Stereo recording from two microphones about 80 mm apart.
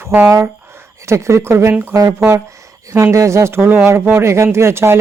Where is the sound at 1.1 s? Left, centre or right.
Right.